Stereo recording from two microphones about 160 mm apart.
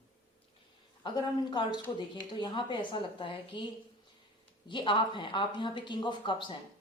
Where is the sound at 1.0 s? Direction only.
30° left (ahead or behind).